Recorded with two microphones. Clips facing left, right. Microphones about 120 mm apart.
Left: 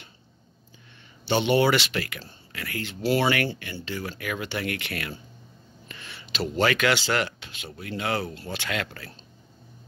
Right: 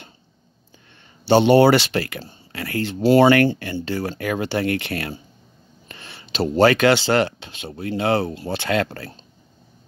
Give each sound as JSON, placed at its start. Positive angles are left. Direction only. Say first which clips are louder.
{"t": 1.2, "sound": "speech", "louder": "right 8 dB", "side_deg": -35}